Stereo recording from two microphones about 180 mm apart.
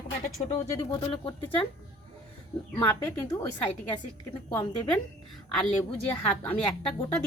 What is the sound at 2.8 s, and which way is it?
Speech, 15° left (ahead or behind).